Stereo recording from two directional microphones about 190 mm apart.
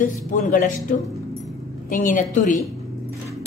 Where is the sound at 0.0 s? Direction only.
45° left (ahead or behind).